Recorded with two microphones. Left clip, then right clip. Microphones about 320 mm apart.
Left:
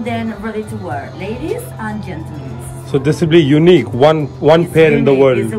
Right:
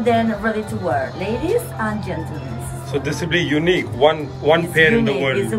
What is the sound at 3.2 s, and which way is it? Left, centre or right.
A woman's voice, centre.